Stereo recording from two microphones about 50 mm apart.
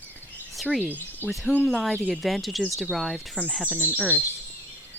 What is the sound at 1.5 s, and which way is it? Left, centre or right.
Speech, centre.